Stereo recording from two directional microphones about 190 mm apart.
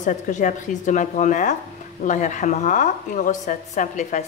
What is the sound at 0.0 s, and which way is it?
A woman's voice, 40° left (ahead or behind).